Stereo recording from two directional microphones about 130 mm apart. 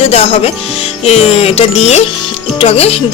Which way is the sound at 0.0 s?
50° left (ahead or behind).